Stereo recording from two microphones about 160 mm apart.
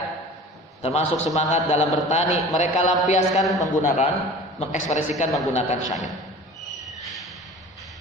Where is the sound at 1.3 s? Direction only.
45° left (ahead or behind).